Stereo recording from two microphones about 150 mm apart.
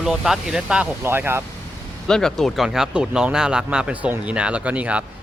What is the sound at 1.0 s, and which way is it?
Speech, 15° right (ahead or behind).